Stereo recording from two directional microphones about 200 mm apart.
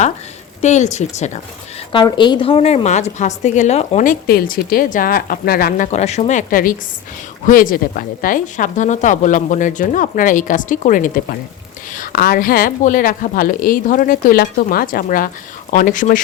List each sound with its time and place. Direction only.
0.6 s a woman's voice: 35° left (ahead or behind)
1.9 s a woman's voice: 25° left (ahead or behind); by 16.2 s 40° left (ahead or behind)